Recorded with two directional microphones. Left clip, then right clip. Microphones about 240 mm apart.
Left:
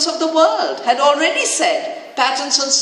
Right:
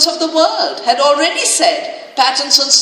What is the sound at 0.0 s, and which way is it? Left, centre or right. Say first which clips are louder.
A woman's voice: right 2 dB; right.